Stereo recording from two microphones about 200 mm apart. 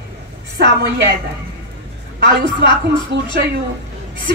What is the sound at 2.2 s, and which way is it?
A woman's voice, 60° right (ahead or behind).